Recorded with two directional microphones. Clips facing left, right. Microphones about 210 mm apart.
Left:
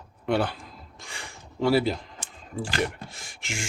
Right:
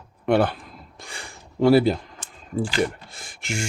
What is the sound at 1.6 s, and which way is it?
Speech, 45° right (ahead or behind).